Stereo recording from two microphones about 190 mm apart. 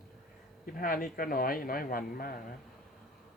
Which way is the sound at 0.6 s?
50° left (ahead or behind).